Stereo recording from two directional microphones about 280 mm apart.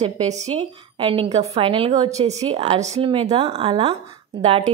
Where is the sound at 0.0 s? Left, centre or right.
Right.